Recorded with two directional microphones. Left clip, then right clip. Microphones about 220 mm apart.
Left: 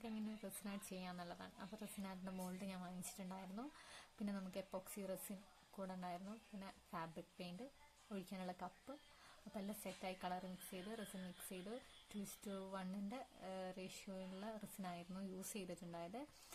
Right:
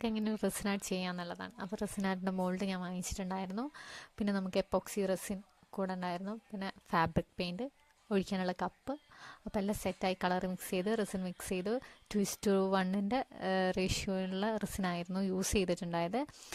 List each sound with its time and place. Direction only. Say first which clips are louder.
0.0 s speech: right 16 dB; 45° right (ahead or behind)